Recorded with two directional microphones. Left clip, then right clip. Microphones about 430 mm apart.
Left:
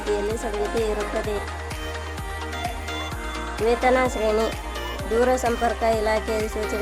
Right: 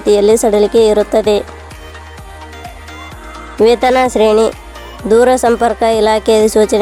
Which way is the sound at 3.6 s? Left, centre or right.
Right.